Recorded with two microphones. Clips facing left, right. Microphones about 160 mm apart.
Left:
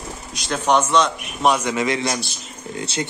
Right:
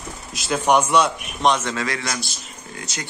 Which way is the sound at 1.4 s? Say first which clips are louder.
Left 2 dB; 10° left (ahead or behind).